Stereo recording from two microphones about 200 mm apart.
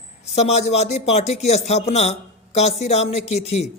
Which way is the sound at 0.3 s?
35° left (ahead or behind).